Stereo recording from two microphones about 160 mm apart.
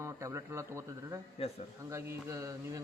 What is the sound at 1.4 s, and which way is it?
Speech, 35° left (ahead or behind).